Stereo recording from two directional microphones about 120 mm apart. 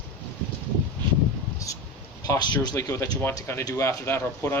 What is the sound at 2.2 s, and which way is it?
Speech, 30° left (ahead or behind).